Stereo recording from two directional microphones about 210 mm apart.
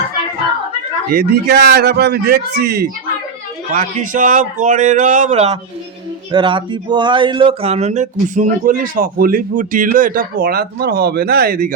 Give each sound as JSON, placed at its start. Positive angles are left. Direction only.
{"t": 1.1, "sound": "a man's voice", "side_deg": -50}
{"t": 3.7, "sound": "speech", "side_deg": -40}